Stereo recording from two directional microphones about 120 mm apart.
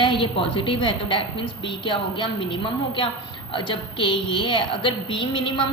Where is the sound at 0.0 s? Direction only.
40° left (ahead or behind).